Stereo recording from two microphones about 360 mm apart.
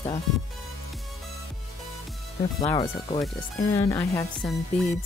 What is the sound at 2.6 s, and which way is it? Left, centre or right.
Speech, centre.